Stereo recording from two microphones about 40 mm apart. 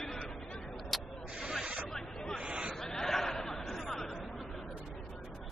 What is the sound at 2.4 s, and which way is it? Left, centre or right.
Hubbub, right.